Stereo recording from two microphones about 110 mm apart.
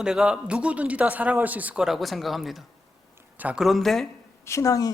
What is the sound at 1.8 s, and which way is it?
Speech, centre (ahead or behind).